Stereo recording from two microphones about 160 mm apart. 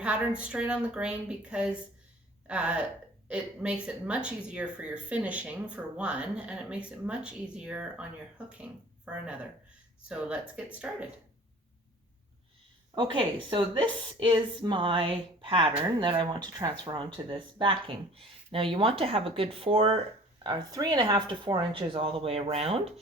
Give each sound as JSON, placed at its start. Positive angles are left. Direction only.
{"t": 0.0, "sound": "speech", "side_deg": -5}
{"t": 13.0, "sound": "a woman's voice", "side_deg": -30}
{"t": 20.4, "sound": "a woman's voice", "side_deg": -25}